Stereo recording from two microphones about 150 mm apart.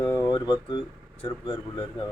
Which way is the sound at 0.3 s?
30° left (ahead or behind).